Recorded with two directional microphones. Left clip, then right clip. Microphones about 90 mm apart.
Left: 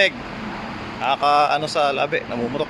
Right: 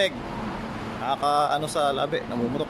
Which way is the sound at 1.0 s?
20° right (ahead or behind).